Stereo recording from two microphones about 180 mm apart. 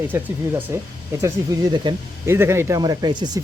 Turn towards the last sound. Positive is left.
turn(degrees=-25)  # may be behind; listen again after turning